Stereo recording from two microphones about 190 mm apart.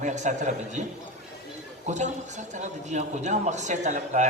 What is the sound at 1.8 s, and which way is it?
A man's voice, 40° right (ahead or behind).